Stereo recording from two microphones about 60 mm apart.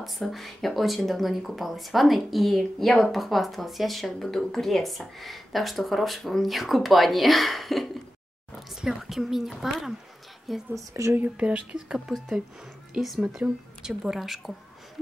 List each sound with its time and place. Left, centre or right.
0.0 s speech: centre
10.9 s speech: right
11.3 s speech: centre
13.4 s speech: right
13.8 s speech: centre